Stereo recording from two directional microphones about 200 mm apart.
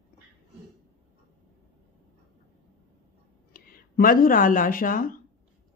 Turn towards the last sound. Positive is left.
turn(degrees=45)  # may be behind; listen again after turning